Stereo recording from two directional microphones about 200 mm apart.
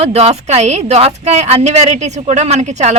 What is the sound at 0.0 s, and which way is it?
A woman's voice, 30° right (ahead or behind).